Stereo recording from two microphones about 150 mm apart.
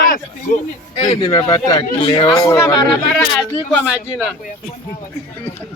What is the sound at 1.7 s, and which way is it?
Speech, 35° left (ahead or behind).